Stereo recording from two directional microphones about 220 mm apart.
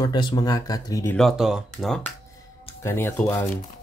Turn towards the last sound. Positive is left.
turn(degrees=10)  # may be behind; listen again after turning